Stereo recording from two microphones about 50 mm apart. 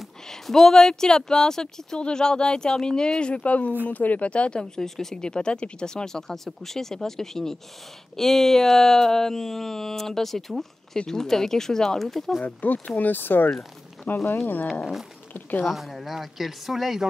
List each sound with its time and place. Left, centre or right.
0.3 s speech: centre
12.4 s speech: left
14.1 s speech: left
15.6 s speech: centre